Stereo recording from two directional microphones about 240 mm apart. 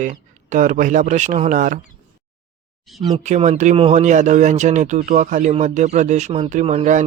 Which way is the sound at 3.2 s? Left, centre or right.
Right.